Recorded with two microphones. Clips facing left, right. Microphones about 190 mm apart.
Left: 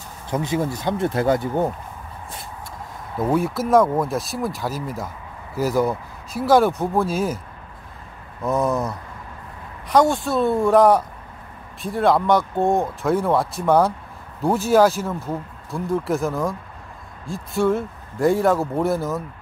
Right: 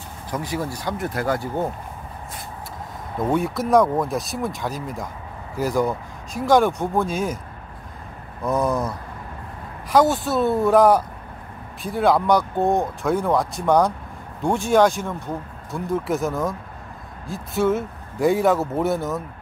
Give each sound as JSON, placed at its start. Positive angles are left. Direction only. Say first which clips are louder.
{"t": 0.3, "sound": "speech", "louder": "left 4 dB", "side_deg": 25}
{"t": 3.2, "sound": "speech", "louder": "left 1 dB", "side_deg": 0}
{"t": 8.5, "sound": "speech", "louder": "left 1 dB", "side_deg": 0}